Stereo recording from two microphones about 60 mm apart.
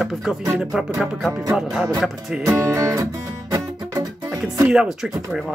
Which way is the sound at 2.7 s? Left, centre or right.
Right.